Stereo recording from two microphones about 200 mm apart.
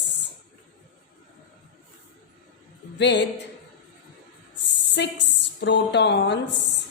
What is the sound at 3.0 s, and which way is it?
Speech, 60° left (ahead or behind).